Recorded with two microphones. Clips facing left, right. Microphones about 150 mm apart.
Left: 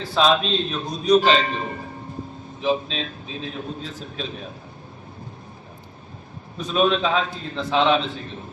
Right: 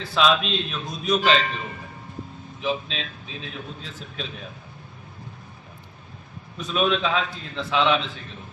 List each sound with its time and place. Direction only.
0.0 s a man's voice: 35° left (ahead or behind)
6.6 s a man's voice: 35° left (ahead or behind)